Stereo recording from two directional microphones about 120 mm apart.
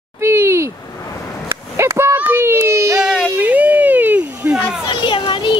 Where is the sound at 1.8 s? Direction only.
20° right (ahead or behind).